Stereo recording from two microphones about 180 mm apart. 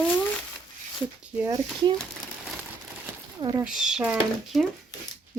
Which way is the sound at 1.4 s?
20° right (ahead or behind).